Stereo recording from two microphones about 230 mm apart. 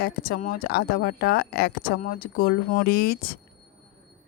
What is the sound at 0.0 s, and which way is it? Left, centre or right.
Speech, left.